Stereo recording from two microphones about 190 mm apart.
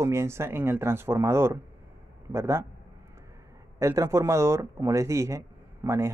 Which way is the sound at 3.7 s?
15° right (ahead or behind).